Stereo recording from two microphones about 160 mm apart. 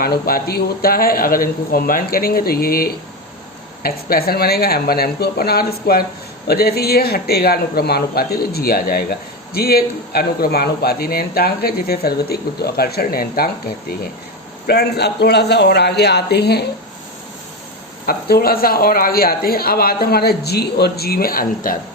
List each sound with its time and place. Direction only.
0.0 s speech: 65° left (ahead or behind)
14.7 s a man's voice: 90° left
18.0 s speech: 70° left (ahead or behind)